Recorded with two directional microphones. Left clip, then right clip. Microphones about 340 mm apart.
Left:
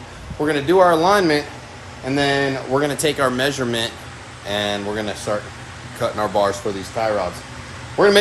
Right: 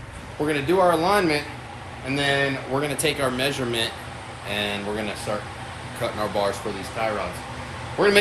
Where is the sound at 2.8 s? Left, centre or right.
Centre.